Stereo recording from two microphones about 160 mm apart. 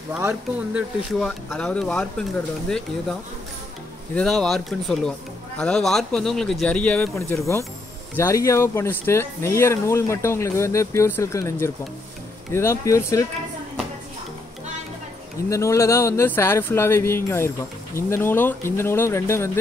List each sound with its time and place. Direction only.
0.1 s speech: 10° right (ahead or behind)
1.2 s speech: 5° left (ahead or behind)
4.1 s speech: 5° left (ahead or behind)
15.5 s speech: 20° left (ahead or behind)